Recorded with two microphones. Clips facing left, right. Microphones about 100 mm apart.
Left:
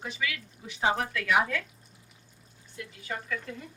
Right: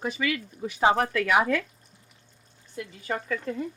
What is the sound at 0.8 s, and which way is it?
Speech, 55° right (ahead or behind).